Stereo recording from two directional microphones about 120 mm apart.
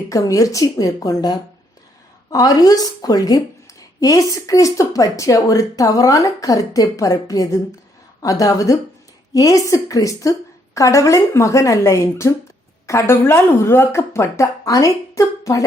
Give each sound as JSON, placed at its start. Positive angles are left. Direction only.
{"t": 0.1, "sound": "a woman's voice", "side_deg": 30}